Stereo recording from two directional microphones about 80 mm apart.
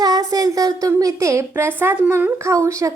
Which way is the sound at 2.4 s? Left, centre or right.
Right.